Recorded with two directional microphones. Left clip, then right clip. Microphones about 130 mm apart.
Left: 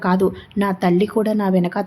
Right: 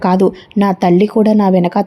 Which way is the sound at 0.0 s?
50° right (ahead or behind).